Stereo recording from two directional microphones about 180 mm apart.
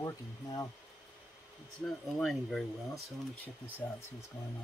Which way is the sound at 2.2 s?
Centre (ahead or behind).